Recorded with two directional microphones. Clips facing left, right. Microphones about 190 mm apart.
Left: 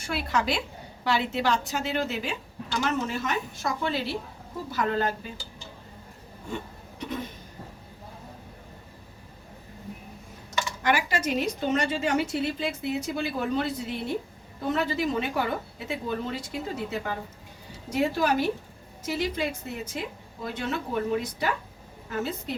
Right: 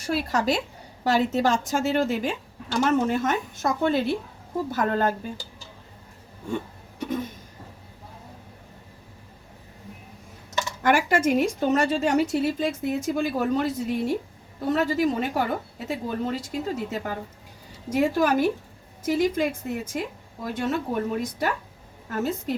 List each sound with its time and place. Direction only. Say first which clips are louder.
0.0 s a woman's voice: right 4 dB; 40° right (ahead or behind)
7.0 s a sound: right 5 dB; 45° right (ahead or behind)
10.8 s a woman's voice: right 6 dB; 50° right (ahead or behind)